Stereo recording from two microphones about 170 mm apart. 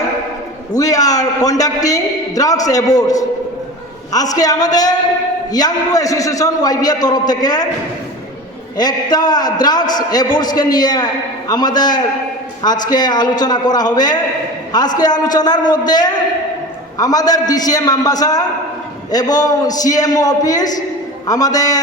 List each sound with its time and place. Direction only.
0.7 s a man's voice: 20° left (ahead or behind)
8.8 s a man's voice: 25° left (ahead or behind)